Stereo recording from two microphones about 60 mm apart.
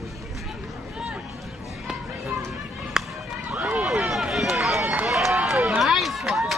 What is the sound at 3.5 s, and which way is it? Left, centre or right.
Run, right.